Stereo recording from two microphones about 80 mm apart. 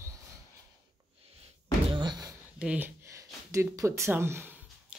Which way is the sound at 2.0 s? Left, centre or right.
Right.